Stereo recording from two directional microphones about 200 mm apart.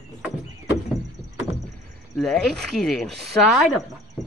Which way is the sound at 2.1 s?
Centre (ahead or behind).